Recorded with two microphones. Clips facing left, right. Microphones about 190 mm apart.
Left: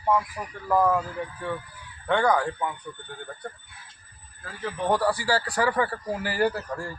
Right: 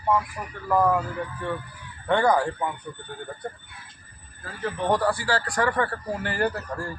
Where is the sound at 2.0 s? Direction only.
5° right (ahead or behind).